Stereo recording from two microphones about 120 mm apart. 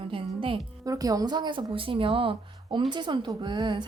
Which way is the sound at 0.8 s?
30° right (ahead or behind).